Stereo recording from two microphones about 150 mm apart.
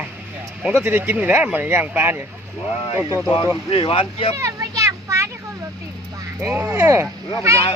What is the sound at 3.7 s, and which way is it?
Speech, 35° left (ahead or behind).